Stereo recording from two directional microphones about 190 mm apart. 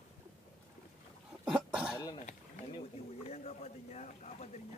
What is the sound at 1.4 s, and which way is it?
Cough, 5° right (ahead or behind).